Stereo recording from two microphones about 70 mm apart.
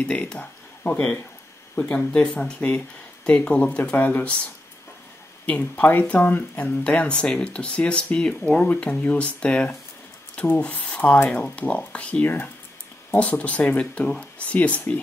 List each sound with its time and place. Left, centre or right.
0.0 s speech: centre
5.5 s speech: left